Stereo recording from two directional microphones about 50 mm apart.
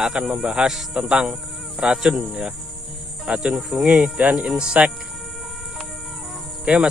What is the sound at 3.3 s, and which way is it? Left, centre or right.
Speech, centre.